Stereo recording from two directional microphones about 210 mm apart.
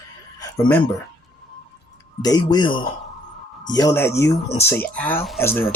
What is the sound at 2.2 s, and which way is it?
Speech, 20° left (ahead or behind).